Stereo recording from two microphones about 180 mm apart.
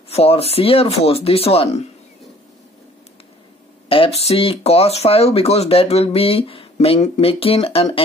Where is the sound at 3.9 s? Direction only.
30° left (ahead or behind).